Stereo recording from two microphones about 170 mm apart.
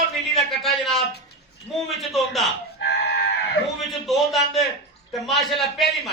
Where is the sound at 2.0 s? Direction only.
Centre (ahead or behind).